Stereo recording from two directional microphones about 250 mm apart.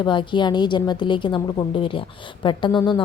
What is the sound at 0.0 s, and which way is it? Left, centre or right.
A woman's voice, centre.